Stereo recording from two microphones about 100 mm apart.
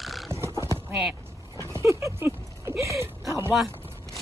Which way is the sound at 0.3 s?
30° right (ahead or behind).